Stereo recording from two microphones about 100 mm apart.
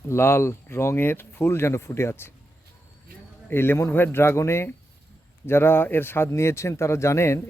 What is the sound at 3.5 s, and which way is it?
Speech, 20° left (ahead or behind).